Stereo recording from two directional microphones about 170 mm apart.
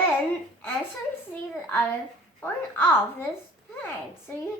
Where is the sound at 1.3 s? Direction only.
10° left (ahead or behind).